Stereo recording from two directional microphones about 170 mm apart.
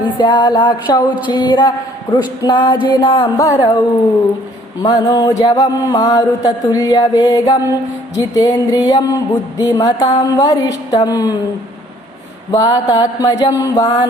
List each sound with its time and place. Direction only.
0.2 s mantra: 25° left (ahead or behind)
4.8 s mantra: 20° left (ahead or behind)
12.5 s mantra: 20° left (ahead or behind)